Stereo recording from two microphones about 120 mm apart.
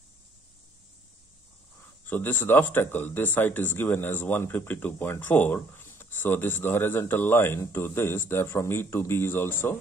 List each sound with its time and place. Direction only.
2.0 s speech: 15° left (ahead or behind)